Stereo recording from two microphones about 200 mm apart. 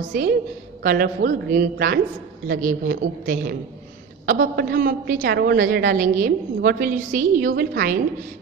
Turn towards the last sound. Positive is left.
turn(degrees=-50)  # may be behind; listen again after turning